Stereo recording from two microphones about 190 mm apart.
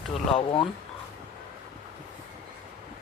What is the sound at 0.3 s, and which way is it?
Speech, 25° left (ahead or behind).